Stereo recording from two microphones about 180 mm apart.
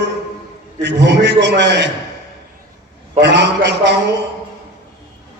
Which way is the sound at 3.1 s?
75° right (ahead or behind).